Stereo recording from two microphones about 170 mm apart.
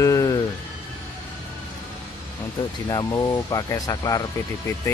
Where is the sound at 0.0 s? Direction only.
20° left (ahead or behind).